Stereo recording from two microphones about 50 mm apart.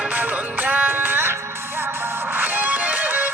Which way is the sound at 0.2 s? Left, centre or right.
Right.